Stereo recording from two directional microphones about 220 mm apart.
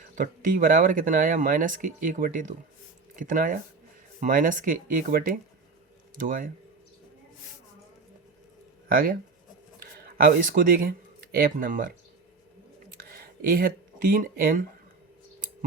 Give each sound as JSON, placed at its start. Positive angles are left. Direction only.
{"t": 0.2, "sound": "speech", "side_deg": -40}
{"t": 9.8, "sound": "speech", "side_deg": -40}
{"t": 13.1, "sound": "speech", "side_deg": -40}